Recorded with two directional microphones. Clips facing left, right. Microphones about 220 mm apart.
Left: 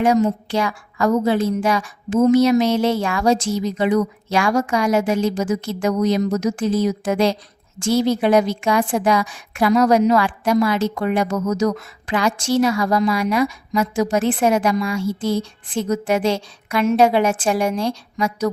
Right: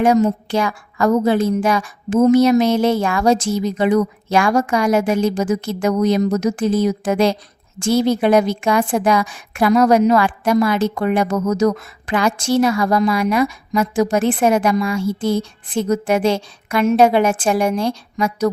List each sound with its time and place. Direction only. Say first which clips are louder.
0.0 s a woman's voice: right 2 dB; 50° right (ahead or behind)